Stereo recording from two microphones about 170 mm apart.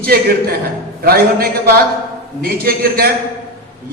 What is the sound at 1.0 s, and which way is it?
A man's voice, 65° right (ahead or behind).